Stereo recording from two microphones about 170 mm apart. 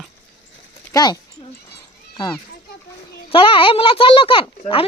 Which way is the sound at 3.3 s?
30° left (ahead or behind).